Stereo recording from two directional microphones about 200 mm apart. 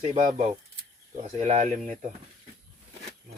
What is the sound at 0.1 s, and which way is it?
Speech, 35° right (ahead or behind).